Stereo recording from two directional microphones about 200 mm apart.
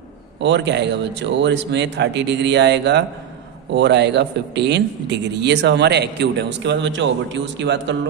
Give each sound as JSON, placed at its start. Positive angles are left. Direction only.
{"t": 0.4, "sound": "speech", "side_deg": -65}